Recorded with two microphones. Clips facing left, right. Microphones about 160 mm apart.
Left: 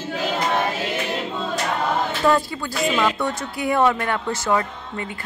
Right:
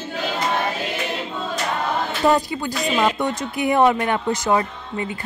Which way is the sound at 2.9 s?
20° right (ahead or behind).